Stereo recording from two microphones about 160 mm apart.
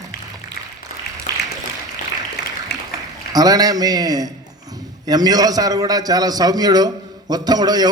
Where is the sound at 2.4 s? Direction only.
90° left.